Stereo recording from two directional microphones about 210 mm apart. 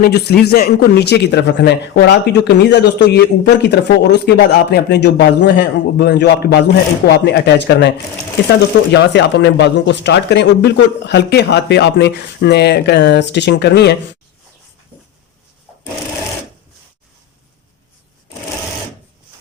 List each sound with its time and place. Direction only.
0.0 s speech: 50° left (ahead or behind)